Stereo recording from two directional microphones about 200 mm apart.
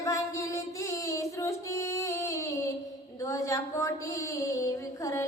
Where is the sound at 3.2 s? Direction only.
15° left (ahead or behind).